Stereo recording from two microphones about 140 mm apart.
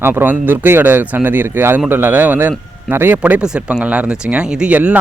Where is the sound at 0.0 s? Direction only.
15° right (ahead or behind).